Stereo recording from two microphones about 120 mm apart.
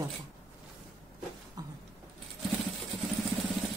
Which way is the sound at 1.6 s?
30° right (ahead or behind).